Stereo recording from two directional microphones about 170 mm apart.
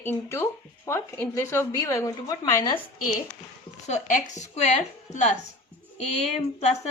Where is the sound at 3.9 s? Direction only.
45° left (ahead or behind).